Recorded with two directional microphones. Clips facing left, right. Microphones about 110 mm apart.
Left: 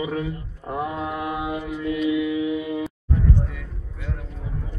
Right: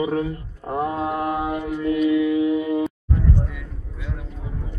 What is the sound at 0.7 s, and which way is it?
Mantra, 30° right (ahead or behind).